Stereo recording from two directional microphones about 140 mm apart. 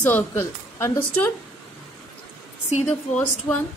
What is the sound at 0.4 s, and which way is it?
Speech, 20° left (ahead or behind).